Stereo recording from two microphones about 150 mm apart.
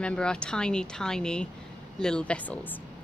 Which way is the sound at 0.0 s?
5° left (ahead or behind).